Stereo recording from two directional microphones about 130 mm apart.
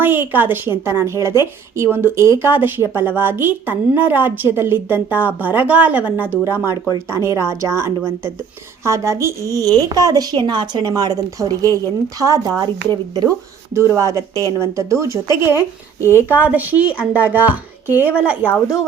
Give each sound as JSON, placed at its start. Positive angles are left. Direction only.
{"t": 0.0, "sound": "a woman's voice", "side_deg": -15}
{"t": 6.7, "sound": "speech", "side_deg": 30}
{"t": 7.1, "sound": "a woman's voice", "side_deg": -20}